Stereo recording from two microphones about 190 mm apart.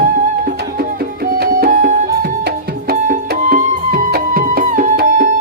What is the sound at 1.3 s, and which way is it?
Music, 50° right (ahead or behind).